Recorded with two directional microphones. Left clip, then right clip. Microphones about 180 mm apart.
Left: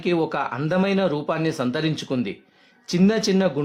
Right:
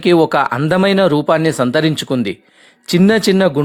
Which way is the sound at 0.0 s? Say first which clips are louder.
Right 11 dB; 45° right (ahead or behind).